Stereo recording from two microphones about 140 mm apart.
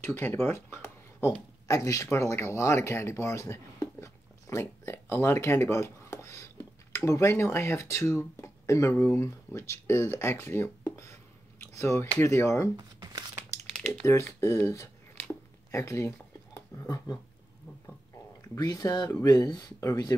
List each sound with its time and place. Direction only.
0.0 s speech: 15° left (ahead or behind)
12.7 s crumpling: 30° right (ahead or behind)
14.0 s speech: 20° left (ahead or behind)
18.5 s speech: 25° left (ahead or behind)